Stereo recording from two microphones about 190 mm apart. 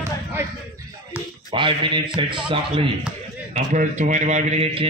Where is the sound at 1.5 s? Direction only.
25° right (ahead or behind).